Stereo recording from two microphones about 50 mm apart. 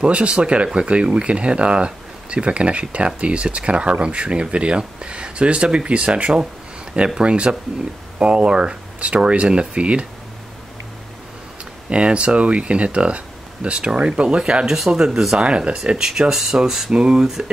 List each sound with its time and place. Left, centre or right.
0.0 s speech: right
11.9 s speech: right
15.4 s speech: right; by 16.9 s centre
16.9 s speech: centre